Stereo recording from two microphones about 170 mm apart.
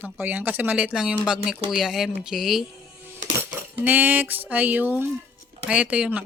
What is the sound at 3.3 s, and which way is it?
Speech, 10° right (ahead or behind).